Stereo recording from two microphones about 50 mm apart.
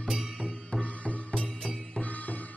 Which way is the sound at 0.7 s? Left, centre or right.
Left.